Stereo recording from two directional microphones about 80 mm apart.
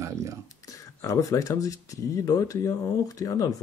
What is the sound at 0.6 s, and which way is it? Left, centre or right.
Speech, left.